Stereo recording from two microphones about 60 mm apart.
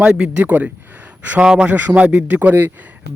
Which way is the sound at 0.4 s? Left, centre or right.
Right.